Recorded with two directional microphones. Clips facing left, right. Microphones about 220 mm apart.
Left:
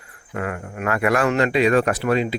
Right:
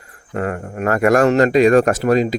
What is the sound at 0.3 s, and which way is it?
Speech, 40° right (ahead or behind).